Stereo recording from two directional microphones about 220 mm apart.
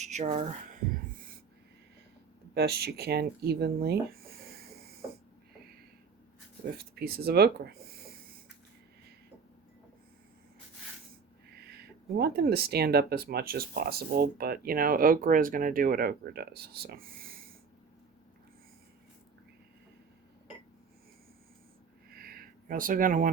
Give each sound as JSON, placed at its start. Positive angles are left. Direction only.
{"t": 0.0, "sound": "speech", "side_deg": -30}
{"t": 2.6, "sound": "speech", "side_deg": -45}
{"t": 6.9, "sound": "speech", "side_deg": -45}
{"t": 12.1, "sound": "speech", "side_deg": -45}
{"t": 22.1, "sound": "a sound", "side_deg": -40}